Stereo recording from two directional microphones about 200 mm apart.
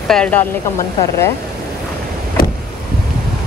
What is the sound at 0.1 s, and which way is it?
Speech, 5° left (ahead or behind).